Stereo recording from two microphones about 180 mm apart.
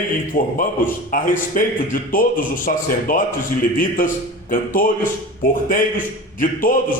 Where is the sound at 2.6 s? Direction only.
50° left (ahead or behind).